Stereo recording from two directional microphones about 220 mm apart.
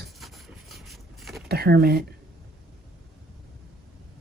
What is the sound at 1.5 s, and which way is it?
Speech, 45° right (ahead or behind).